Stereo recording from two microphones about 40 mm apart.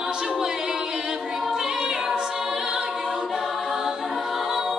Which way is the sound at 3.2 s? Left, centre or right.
Centre.